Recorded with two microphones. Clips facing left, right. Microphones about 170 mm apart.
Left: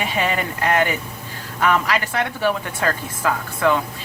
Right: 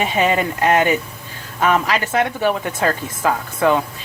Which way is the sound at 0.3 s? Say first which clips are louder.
Right 5 dB; 25° right (ahead or behind).